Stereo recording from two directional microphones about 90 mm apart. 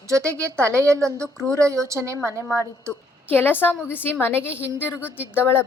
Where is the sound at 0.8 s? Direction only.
35° right (ahead or behind).